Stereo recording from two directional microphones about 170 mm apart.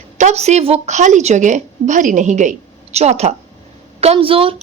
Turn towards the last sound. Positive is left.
turn(degrees=-30)  # may be behind; listen again after turning